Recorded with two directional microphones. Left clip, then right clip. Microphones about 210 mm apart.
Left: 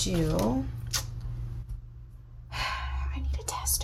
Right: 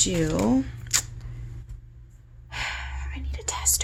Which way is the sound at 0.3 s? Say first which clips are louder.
Right 5 dB; 45° right (ahead or behind).